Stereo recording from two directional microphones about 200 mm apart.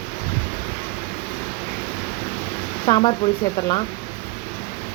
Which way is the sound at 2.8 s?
25° left (ahead or behind).